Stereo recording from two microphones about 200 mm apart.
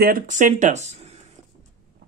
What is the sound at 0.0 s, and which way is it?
Speech, 45° right (ahead or behind).